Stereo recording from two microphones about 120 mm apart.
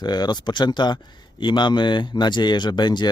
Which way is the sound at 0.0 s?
35° left (ahead or behind).